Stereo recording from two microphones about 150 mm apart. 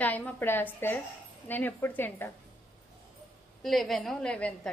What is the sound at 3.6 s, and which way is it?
A woman's voice, centre (ahead or behind).